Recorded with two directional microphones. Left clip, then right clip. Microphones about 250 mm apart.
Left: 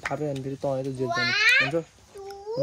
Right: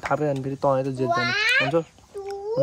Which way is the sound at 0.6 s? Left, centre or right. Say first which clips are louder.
Right 6 dB; right.